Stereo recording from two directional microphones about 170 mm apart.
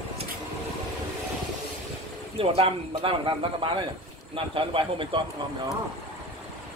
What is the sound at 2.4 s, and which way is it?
A man's voice, 30° right (ahead or behind).